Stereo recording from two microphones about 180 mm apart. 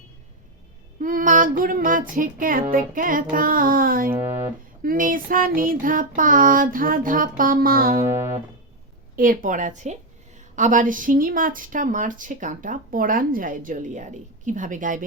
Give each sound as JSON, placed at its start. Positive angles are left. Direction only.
{"t": 0.9, "sound": "child singing", "side_deg": -50}
{"t": 2.7, "sound": "speech", "side_deg": -50}
{"t": 9.1, "sound": "speech", "side_deg": -50}